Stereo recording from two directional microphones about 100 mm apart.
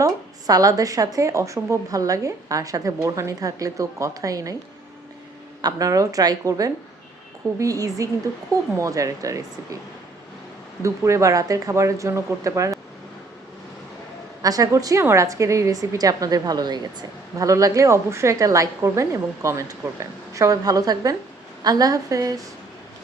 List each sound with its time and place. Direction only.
0.0 s a woman's voice: 35° right (ahead or behind)
5.6 s a woman's voice: 35° right (ahead or behind)
10.8 s a woman's voice: 30° right (ahead or behind)
14.4 s a woman's voice: 35° right (ahead or behind)